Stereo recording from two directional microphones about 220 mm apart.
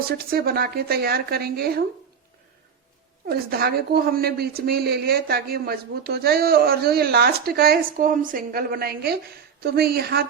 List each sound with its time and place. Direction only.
0.3 s a woman's voice: 45° right (ahead or behind)
3.2 s a woman's voice: 45° right (ahead or behind)